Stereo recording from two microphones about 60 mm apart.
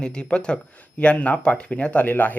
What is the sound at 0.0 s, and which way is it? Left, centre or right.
Speech, centre.